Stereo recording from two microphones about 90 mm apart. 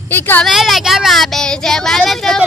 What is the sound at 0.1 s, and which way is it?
Speech, 20° left (ahead or behind).